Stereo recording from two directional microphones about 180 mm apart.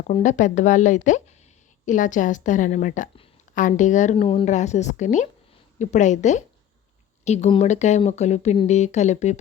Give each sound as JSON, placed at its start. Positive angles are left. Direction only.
{"t": 0.1, "sound": "a woman's voice", "side_deg": 45}